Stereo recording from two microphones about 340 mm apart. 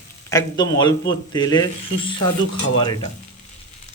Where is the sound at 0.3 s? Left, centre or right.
Centre.